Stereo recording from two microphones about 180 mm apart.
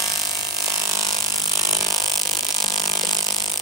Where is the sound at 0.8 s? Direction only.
20° right (ahead or behind).